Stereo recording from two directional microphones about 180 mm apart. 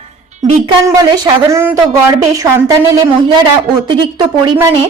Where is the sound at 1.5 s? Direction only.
10° right (ahead or behind).